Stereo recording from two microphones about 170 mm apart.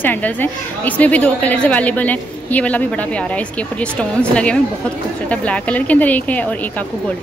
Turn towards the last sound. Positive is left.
turn(degrees=10)  # may be behind; listen again after turning